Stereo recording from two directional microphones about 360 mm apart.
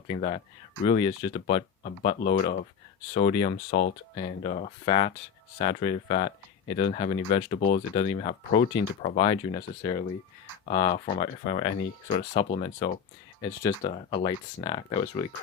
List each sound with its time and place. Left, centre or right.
0.1 s speech: centre
3.7 s speech: left
4.1 s speech: centre